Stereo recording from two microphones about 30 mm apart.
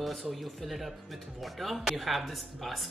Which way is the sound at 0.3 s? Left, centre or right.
Centre.